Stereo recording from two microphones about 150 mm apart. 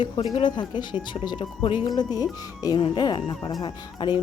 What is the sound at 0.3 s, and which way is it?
A woman's voice, 30° left (ahead or behind).